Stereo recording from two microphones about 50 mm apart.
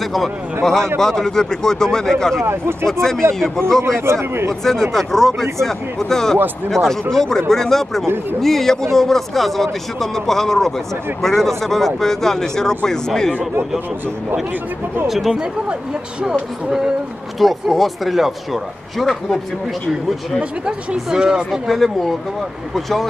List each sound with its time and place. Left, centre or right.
0.0 s a man's voice: centre
2.4 s speech: right
2.9 s speech: centre
3.8 s a man's voice: right
4.9 s speech: centre
15.0 s speech: centre
17.4 s speech: centre
20.3 s speech: centre
21.5 s speech: centre